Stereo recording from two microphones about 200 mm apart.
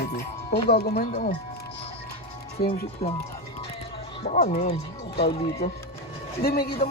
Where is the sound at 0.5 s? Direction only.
50° left (ahead or behind).